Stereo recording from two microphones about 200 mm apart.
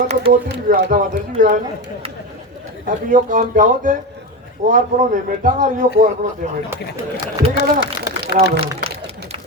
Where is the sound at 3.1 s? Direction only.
40° right (ahead or behind).